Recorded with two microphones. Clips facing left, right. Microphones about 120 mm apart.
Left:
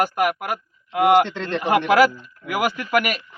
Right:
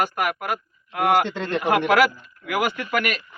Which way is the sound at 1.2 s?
10° right (ahead or behind).